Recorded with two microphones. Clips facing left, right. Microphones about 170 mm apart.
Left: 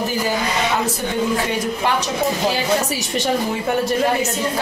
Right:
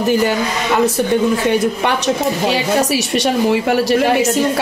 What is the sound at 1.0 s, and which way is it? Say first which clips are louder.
A woman's voice: right 6 dB; 70° right (ahead or behind).